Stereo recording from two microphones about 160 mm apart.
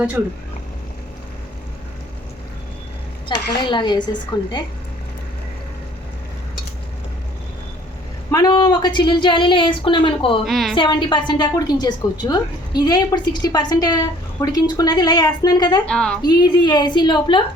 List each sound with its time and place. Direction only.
3.6 s a woman's voice: 30° left (ahead or behind)
8.3 s speech: 25° left (ahead or behind)
10.4 s a woman's voice: centre (ahead or behind)
10.8 s a woman's voice: 30° left (ahead or behind)
15.9 s a woman's voice: 5° left (ahead or behind)
16.2 s a woman's voice: 25° left (ahead or behind)